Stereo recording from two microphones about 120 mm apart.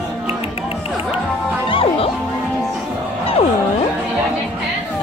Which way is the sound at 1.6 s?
50° left (ahead or behind).